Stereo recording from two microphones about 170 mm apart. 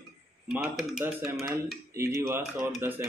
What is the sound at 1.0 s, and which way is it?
A man's voice, 15° right (ahead or behind).